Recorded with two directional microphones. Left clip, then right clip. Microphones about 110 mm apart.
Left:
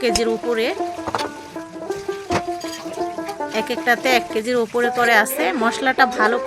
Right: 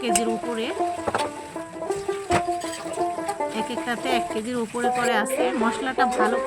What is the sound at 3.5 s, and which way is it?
Speech, 20° left (ahead or behind).